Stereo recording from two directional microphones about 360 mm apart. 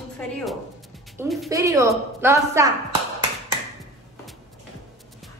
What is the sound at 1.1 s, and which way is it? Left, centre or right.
A woman's voice, centre.